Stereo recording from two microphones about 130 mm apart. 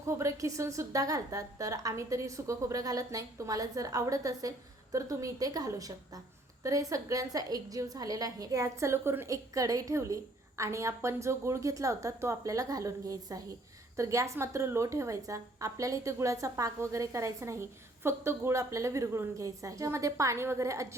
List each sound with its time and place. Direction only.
0.0 s a woman's voice: 25° right (ahead or behind)